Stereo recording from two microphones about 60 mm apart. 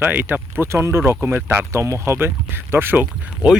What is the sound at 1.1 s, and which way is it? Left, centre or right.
Speech, right.